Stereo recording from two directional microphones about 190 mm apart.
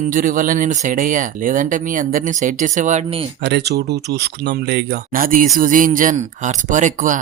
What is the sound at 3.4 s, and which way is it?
Speech, 60° right (ahead or behind).